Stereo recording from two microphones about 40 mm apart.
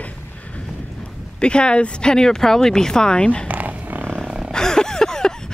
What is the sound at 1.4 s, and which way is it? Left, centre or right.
Speech, left.